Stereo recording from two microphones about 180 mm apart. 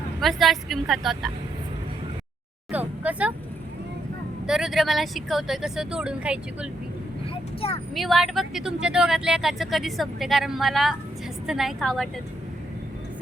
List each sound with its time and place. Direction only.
0.2 s speech: centre (ahead or behind)
2.7 s a sound: 10° right (ahead or behind)
4.4 s speech: centre (ahead or behind)
7.6 s speech: 30° left (ahead or behind)
7.9 s speech: centre (ahead or behind)